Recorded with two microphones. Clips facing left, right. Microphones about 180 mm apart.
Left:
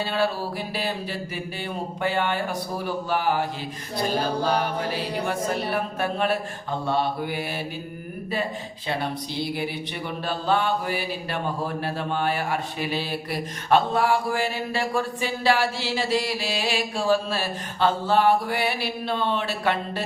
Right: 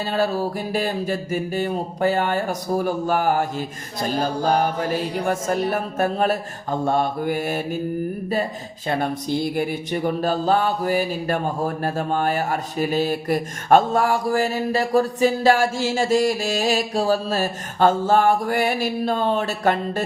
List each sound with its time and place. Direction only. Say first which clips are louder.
0.1 s speech: right 3 dB; 45° right (ahead or behind)
8.9 s speech: right 6 dB; 50° right (ahead or behind)